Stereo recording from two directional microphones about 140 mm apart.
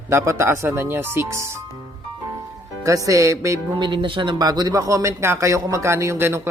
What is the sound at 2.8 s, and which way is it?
Speech, 25° right (ahead or behind).